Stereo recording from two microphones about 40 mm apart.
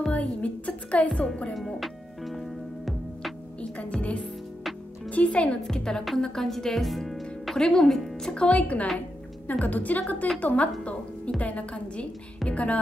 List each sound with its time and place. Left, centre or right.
0.1 s music: left
1.5 s music: centre
5.1 s a woman's voice: left
5.6 s a woman's voice: centre
7.5 s a woman's voice: centre; by 8.8 s left
9.5 s a woman's voice: left